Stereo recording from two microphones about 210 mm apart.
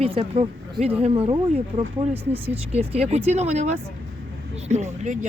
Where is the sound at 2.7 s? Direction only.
30° right (ahead or behind).